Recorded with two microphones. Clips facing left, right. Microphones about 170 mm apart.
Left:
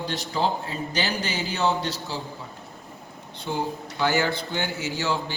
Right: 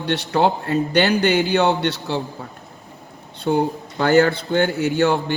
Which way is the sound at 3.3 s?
60° right (ahead or behind).